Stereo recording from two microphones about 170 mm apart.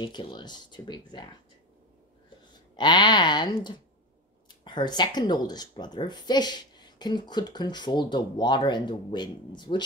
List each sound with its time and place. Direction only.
0.0 s speech: 30° left (ahead or behind)
2.7 s speech: 25° left (ahead or behind)